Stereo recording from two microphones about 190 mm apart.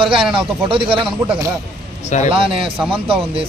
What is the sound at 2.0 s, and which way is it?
Speech, 40° left (ahead or behind).